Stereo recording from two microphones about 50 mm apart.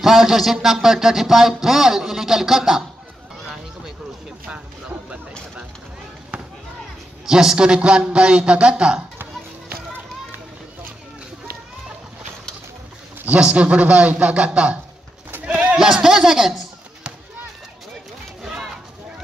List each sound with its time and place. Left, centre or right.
0.0 s speech: centre
6.3 s basketball bounce: right
7.2 s a man's voice: centre
13.4 s a man's voice: right
15.4 s a sound: right
15.8 s speech: centre
18.4 s a sound: centre